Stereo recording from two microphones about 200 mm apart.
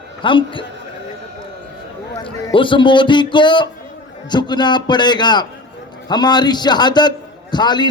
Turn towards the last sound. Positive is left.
turn(degrees=20)  # may be behind; listen again after turning